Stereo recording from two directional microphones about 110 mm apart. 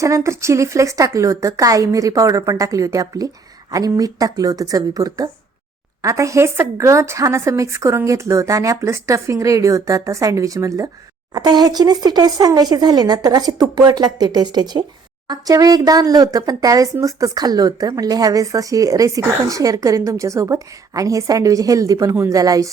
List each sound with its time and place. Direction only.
0.0 s speech: 25° right (ahead or behind)